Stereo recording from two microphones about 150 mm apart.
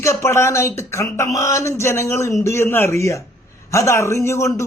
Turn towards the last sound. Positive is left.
turn(degrees=20)  # may be behind; listen again after turning